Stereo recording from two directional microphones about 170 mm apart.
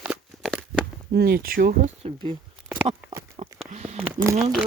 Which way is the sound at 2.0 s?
35° right (ahead or behind).